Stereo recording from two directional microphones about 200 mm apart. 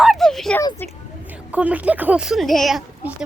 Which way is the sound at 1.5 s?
5° right (ahead or behind).